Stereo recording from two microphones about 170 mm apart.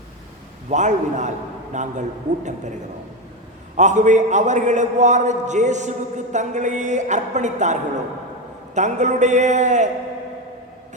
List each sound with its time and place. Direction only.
0.7 s a man's voice: 45° right (ahead or behind)
3.8 s a man's voice: 45° right (ahead or behind)